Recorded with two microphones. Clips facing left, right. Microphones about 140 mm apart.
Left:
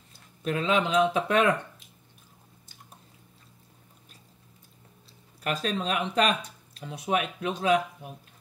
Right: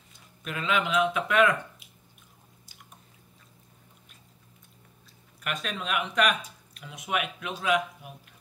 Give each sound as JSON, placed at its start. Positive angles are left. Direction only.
{"t": 0.4, "sound": "speech", "side_deg": 30}
{"t": 5.4, "sound": "speech", "side_deg": 35}